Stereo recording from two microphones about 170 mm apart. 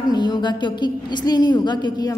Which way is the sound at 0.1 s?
25° left (ahead or behind).